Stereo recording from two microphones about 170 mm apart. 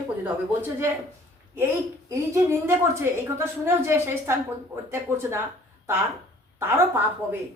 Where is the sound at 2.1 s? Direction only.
20° right (ahead or behind).